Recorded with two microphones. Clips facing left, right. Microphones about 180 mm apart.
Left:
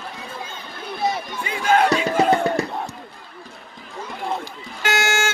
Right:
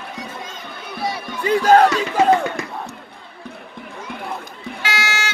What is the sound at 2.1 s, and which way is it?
Music, 35° left (ahead or behind).